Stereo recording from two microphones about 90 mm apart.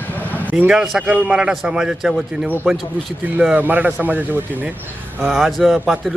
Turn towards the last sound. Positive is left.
turn(degrees=0)  # may be behind; listen again after turning